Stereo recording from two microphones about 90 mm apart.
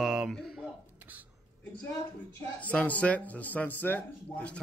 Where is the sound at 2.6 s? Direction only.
15° left (ahead or behind).